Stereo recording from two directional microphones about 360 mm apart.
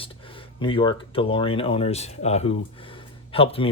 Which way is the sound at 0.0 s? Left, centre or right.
Centre.